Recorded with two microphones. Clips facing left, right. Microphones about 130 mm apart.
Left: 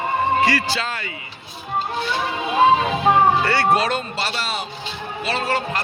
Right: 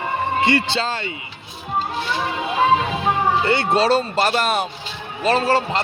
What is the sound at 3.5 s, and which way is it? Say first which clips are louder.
Speech: right 2 dB; 25° right (ahead or behind).